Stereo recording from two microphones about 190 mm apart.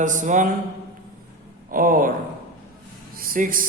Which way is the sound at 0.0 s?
40° right (ahead or behind).